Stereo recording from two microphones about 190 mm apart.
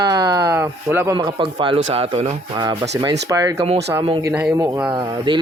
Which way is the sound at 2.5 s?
25° right (ahead or behind).